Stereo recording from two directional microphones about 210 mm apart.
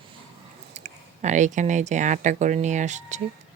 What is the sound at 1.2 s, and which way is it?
Speech, 35° right (ahead or behind).